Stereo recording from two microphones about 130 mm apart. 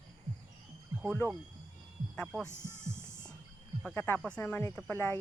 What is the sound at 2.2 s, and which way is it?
Livestock, centre (ahead or behind).